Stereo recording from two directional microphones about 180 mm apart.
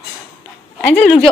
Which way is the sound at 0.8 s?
10° left (ahead or behind).